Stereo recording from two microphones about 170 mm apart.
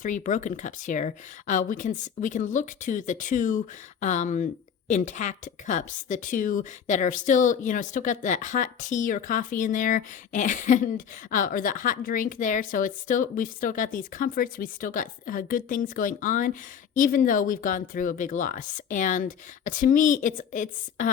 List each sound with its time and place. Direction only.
0.0 s a woman's voice: 50° left (ahead or behind)